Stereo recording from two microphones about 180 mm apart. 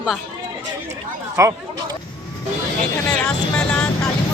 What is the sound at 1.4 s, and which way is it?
Speech, 15° right (ahead or behind).